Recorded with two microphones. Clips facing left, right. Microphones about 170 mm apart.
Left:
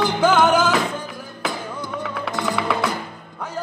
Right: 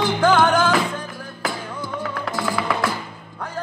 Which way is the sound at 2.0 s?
Centre (ahead or behind).